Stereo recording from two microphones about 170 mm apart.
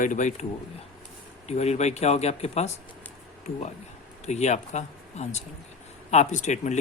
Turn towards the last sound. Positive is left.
turn(degrees=45)  # may be behind; listen again after turning